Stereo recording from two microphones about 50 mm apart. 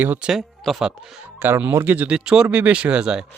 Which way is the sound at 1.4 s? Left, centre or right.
Right.